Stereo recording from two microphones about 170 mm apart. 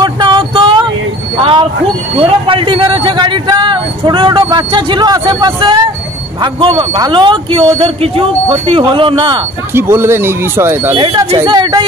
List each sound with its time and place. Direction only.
0.0 s a sound: 25° right (ahead or behind)
2.1 s a man's voice: 30° right (ahead or behind)
9.8 s speech: 15° right (ahead or behind)
11.0 s a man's voice: 30° right (ahead or behind)